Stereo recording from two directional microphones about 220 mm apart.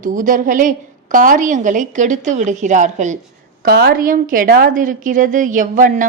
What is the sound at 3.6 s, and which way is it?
A woman's voice, 45° right (ahead or behind).